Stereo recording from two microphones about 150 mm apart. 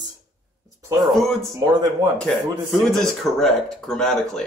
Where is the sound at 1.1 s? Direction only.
Centre (ahead or behind).